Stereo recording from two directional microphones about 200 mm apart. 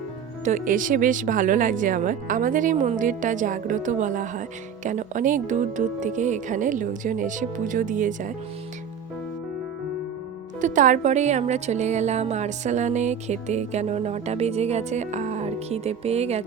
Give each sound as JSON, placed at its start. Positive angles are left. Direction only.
{"t": 0.4, "sound": "speech", "side_deg": -40}
{"t": 10.6, "sound": "speech", "side_deg": -40}